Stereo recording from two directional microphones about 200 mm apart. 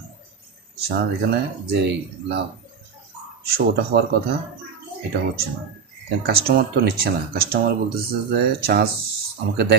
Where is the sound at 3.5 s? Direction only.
50° right (ahead or behind).